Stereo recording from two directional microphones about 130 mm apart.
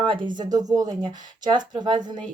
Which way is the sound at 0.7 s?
25° right (ahead or behind).